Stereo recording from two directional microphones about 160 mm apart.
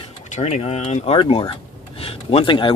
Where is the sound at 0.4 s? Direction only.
45° left (ahead or behind).